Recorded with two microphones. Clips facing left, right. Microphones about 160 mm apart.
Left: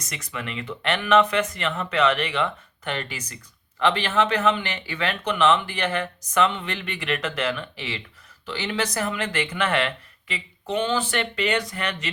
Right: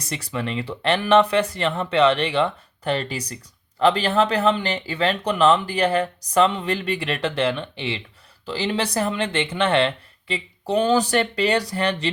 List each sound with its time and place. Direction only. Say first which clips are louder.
0.0 s speech: right 6 dB; 30° right (ahead or behind)